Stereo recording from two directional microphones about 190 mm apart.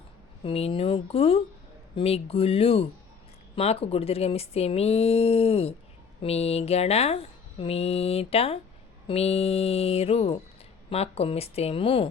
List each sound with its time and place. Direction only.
0.4 s speech: 30° left (ahead or behind)